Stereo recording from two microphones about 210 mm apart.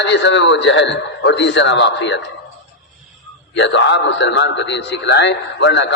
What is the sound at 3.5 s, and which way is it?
A man's voice, 60° left (ahead or behind).